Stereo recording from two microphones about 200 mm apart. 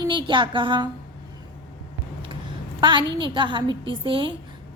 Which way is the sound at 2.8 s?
20° right (ahead or behind).